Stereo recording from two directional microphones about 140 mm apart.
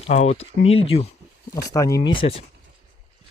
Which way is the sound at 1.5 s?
25° left (ahead or behind).